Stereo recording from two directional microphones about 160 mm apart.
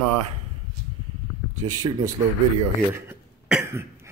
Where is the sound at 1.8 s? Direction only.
25° right (ahead or behind).